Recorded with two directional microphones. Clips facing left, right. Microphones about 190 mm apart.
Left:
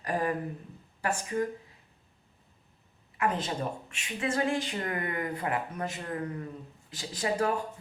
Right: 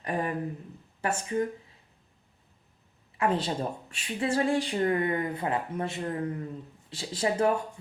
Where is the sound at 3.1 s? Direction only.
30° right (ahead or behind).